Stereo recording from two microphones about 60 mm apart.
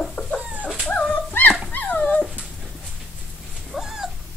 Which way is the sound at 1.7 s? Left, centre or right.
Left.